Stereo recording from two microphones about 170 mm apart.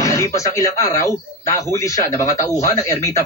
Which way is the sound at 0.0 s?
20° left (ahead or behind).